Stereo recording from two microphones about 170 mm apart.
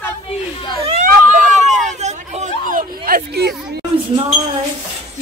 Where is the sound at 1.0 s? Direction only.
50° right (ahead or behind); by 3.5 s 65° right (ahead or behind).